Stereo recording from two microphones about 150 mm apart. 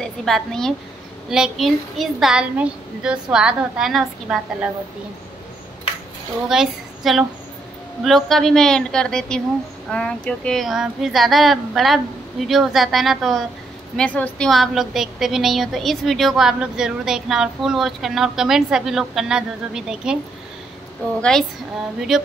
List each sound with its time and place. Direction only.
0.0 s a woman's voice: centre (ahead or behind)
6.5 s a woman's voice: centre (ahead or behind)
21.2 s a woman's voice: 5° left (ahead or behind)